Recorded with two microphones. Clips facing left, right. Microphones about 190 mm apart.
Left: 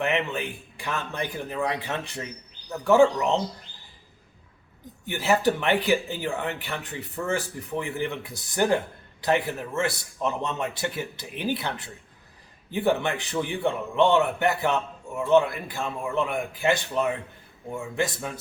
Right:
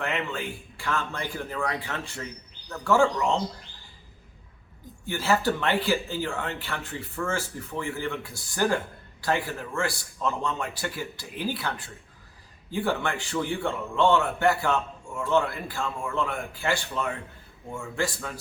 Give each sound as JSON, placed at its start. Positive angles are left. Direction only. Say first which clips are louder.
{"t": 0.0, "sound": "a man's voice", "louder": "left 4 dB", "side_deg": 20}
{"t": 5.0, "sound": "a man's voice", "louder": "left 2 dB", "side_deg": 20}